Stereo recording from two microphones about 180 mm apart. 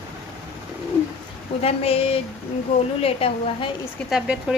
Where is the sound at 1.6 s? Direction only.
35° left (ahead or behind).